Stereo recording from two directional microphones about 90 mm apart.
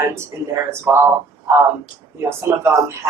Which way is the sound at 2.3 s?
30° right (ahead or behind).